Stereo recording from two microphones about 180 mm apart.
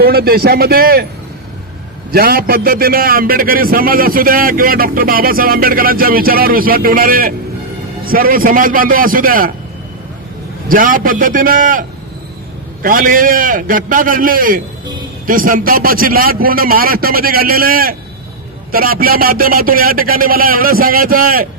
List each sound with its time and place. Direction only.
0.0 s a man's voice: 60° right (ahead or behind)
2.1 s a man's voice: 55° right (ahead or behind)
10.7 s a man's voice: 50° right (ahead or behind)
12.8 s a man's voice: 50° right (ahead or behind)